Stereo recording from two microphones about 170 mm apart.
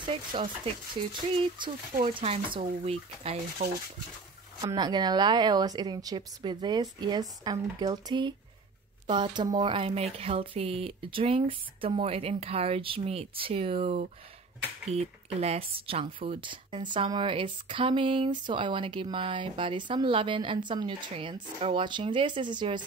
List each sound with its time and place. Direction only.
0.0 s speech: 30° right (ahead or behind)
2.1 s speech: 30° right (ahead or behind)
3.6 s speech: 60° right (ahead or behind)
4.6 s a woman's voice: 25° right (ahead or behind)